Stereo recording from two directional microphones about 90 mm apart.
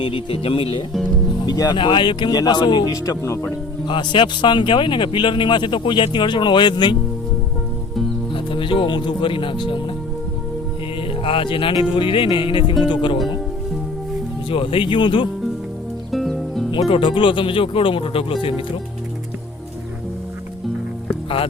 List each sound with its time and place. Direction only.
0.0 s speech: 85° left
1.5 s speech: 50° left (ahead or behind)
2.3 s speech: 50° left (ahead or behind)
2.9 s speech: 35° left (ahead or behind)
3.8 s speech: 65° left (ahead or behind)
8.3 s speech: 70° left (ahead or behind)
11.2 s speech: 85° left; by 13.1 s 65° left (ahead or behind)
14.5 s speech: 80° left
16.1 s music: centre (ahead or behind)
16.7 s speech: 70° left (ahead or behind); by 18.3 s 85° left